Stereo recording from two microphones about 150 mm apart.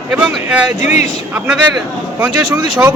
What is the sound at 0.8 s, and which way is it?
Speech, 50° left (ahead or behind).